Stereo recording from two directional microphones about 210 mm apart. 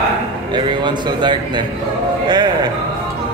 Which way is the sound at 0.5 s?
20° right (ahead or behind).